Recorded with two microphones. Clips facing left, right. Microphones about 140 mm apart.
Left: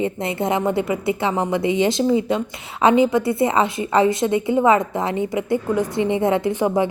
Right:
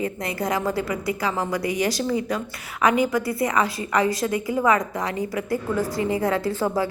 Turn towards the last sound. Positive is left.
turn(degrees=20)  # may be behind; listen again after turning